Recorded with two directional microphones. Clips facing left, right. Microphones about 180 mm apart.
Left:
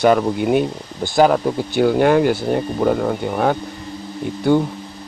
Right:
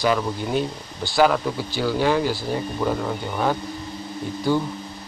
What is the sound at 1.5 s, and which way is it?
Speech, 55° left (ahead or behind).